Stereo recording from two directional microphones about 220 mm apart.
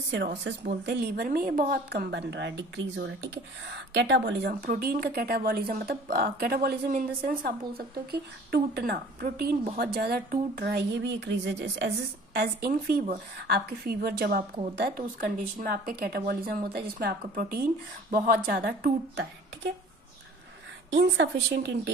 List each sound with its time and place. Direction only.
0.5 s a woman's voice: 45° right (ahead or behind)
20.9 s a woman's voice: 50° right (ahead or behind)